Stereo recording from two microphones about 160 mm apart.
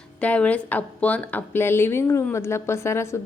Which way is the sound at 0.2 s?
10° left (ahead or behind).